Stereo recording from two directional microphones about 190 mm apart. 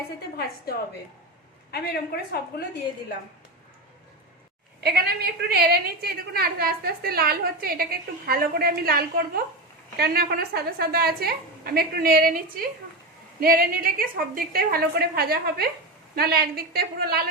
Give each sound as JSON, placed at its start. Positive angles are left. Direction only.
{"t": 0.3, "sound": "a woman's voice", "side_deg": 55}
{"t": 4.8, "sound": "a woman's voice", "side_deg": -55}